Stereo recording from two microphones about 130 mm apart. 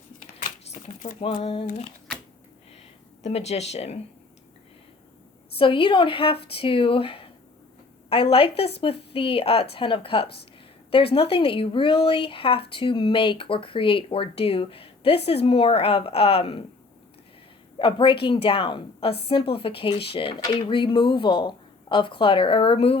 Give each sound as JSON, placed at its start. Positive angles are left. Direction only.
{"t": 0.6, "sound": "a sound", "side_deg": 55}
{"t": 1.4, "sound": "speech", "side_deg": 55}
{"t": 3.2, "sound": "speech", "side_deg": 55}
{"t": 5.5, "sound": "speech", "side_deg": 40}
{"t": 17.7, "sound": "speech", "side_deg": 40}